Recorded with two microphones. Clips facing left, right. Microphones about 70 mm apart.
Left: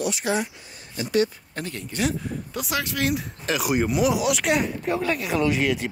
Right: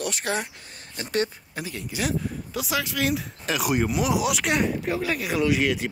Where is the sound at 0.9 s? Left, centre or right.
Right.